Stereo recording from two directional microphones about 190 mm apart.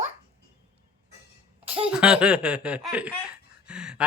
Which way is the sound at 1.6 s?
30° right (ahead or behind).